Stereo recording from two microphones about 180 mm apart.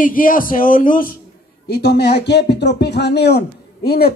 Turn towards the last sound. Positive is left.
turn(degrees=60)  # may be behind; listen again after turning